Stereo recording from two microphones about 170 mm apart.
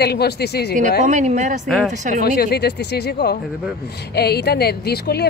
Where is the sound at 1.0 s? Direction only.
45° right (ahead or behind).